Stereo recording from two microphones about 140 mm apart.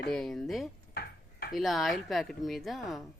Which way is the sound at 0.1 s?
5° left (ahead or behind).